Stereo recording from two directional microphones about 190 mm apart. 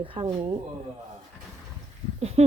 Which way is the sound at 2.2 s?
35° right (ahead or behind).